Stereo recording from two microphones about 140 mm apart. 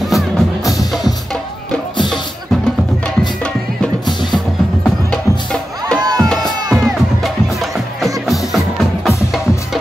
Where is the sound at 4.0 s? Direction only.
30° left (ahead or behind).